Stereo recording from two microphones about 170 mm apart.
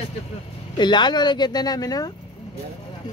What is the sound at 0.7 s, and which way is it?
Speech, 25° left (ahead or behind).